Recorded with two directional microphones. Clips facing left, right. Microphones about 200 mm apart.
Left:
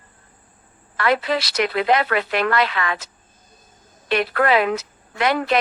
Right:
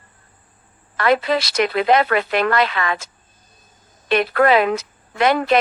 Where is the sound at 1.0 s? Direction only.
45° right (ahead or behind).